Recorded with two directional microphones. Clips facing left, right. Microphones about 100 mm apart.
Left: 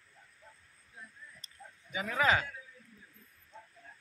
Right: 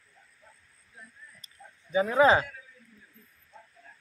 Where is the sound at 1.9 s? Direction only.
30° right (ahead or behind).